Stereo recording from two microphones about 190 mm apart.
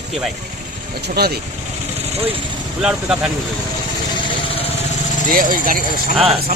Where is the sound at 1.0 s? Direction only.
55° right (ahead or behind).